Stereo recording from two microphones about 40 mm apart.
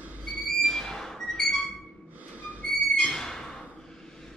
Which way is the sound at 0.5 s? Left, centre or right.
Centre.